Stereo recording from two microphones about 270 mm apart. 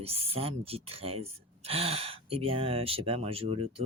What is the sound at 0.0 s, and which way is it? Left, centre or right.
Speech, right.